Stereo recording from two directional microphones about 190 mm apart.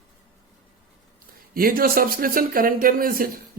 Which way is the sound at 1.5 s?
50° right (ahead or behind).